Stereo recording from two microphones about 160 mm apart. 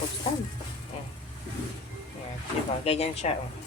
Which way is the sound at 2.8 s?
40° left (ahead or behind).